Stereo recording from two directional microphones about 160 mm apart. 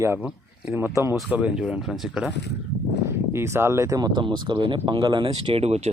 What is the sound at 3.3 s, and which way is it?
Speech, 15° right (ahead or behind).